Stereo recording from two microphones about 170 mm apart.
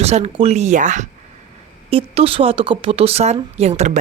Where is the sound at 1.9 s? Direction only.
35° right (ahead or behind).